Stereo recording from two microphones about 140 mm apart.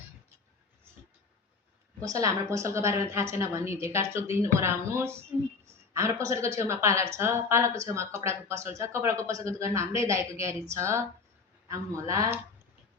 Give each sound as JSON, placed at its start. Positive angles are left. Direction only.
{"t": 2.0, "sound": "a woman's voice", "side_deg": -20}